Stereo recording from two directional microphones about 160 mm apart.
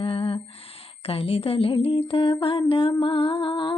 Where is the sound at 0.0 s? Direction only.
35° left (ahead or behind).